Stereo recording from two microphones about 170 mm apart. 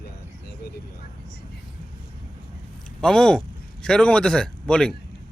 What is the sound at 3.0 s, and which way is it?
A man's voice, 5° left (ahead or behind).